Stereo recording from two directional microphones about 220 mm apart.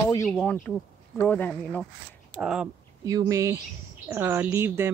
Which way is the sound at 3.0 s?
15° right (ahead or behind).